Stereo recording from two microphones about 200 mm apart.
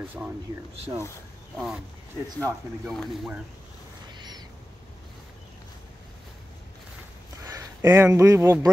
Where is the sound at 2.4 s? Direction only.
Centre (ahead or behind).